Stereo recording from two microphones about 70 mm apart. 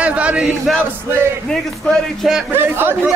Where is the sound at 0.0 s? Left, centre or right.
Centre.